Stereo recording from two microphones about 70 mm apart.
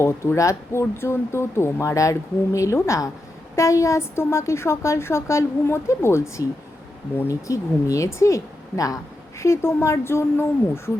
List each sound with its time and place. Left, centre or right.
0.0 s speech: left
9.4 s speech: left